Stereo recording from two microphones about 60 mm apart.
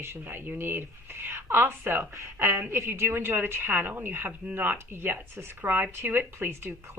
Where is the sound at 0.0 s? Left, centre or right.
Right.